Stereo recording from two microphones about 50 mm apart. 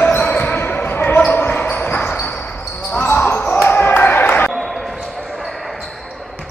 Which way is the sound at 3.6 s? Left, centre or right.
Left.